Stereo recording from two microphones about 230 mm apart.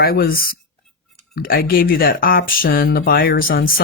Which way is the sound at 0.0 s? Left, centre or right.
Left.